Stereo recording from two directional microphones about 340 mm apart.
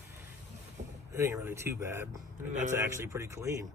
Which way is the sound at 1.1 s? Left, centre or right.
Centre.